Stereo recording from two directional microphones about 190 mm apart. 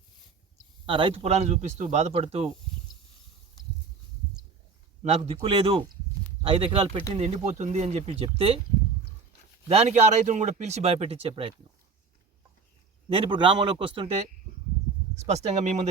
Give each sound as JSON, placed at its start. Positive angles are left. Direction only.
{"t": 0.9, "sound": "speech", "side_deg": -30}
{"t": 5.0, "sound": "a man's voice", "side_deg": -30}
{"t": 9.6, "sound": "speech", "side_deg": -35}
{"t": 13.1, "sound": "a man's voice", "side_deg": -25}
{"t": 15.1, "sound": "speech", "side_deg": -35}